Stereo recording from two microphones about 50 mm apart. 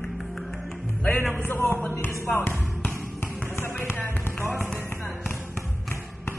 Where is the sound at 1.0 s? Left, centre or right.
Left.